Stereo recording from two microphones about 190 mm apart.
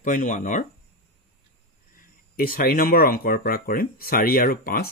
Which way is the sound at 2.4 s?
50° left (ahead or behind).